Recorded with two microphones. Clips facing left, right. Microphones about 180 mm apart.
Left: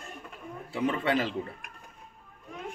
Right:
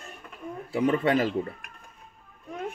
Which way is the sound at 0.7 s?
40° right (ahead or behind).